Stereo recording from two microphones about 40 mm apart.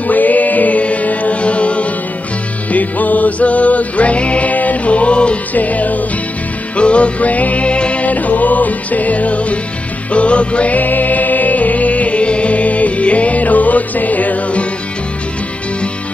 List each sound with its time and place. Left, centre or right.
0.1 s music: left
2.7 s music: left
5.5 s music: left
6.8 s music: left
10.8 s music: left